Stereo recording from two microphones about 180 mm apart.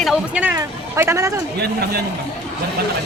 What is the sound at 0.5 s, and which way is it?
Speech, 15° right (ahead or behind).